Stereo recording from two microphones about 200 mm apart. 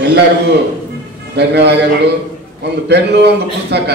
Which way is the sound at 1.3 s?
55° right (ahead or behind).